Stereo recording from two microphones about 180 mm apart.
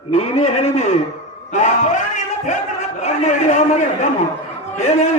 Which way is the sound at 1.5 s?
45° left (ahead or behind).